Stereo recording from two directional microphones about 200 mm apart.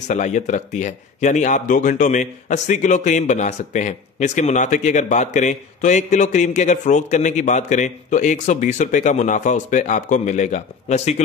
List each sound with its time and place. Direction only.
0.1 s speech: 35° left (ahead or behind)